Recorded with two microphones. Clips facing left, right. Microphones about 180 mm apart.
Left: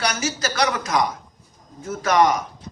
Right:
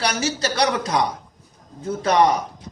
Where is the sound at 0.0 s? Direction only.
30° right (ahead or behind).